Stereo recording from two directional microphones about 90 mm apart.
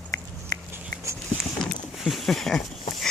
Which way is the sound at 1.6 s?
Centre (ahead or behind).